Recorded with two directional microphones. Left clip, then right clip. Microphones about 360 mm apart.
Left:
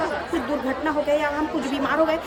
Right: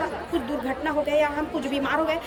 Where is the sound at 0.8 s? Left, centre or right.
Centre.